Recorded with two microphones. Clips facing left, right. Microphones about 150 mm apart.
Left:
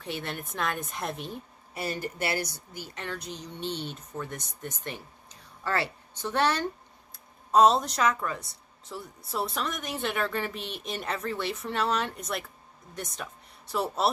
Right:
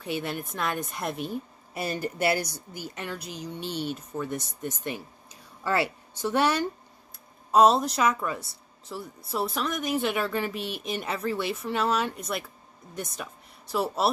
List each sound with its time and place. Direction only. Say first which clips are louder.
0.0 s a woman's voice: right 4 dB; 5° right (ahead or behind)
1.7 s a woman's voice: right 2 dB; 15° right (ahead or behind)